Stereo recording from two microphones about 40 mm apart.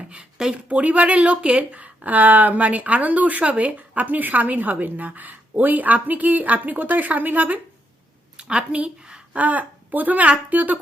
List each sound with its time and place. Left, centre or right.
0.0 s speech: right
8.4 s a woman's voice: right
9.3 s a woman's voice: right